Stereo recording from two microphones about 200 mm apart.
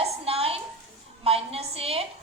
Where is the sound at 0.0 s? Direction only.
30° right (ahead or behind).